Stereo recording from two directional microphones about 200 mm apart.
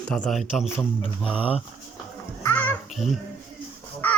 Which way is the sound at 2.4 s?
10° left (ahead or behind).